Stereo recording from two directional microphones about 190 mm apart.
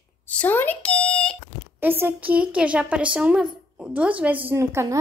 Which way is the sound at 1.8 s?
10° right (ahead or behind).